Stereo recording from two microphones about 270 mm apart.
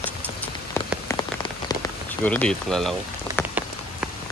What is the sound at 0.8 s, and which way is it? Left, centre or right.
Rain on surface, centre.